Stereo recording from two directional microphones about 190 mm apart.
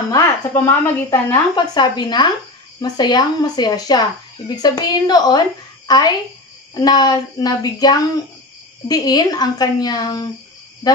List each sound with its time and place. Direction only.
0.1 s a woman's voice: 15° left (ahead or behind)